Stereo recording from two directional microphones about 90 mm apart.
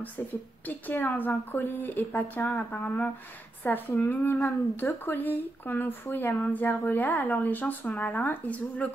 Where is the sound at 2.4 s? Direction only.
30° left (ahead or behind).